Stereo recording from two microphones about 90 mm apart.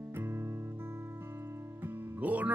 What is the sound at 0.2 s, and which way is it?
Music, 25° right (ahead or behind).